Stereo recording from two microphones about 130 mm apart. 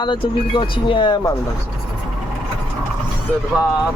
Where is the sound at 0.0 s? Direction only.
35° left (ahead or behind).